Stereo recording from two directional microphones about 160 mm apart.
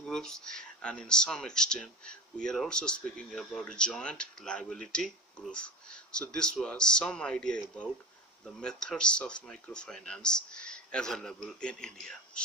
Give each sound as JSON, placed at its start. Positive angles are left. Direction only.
{"t": 0.0, "sound": "speech", "side_deg": 5}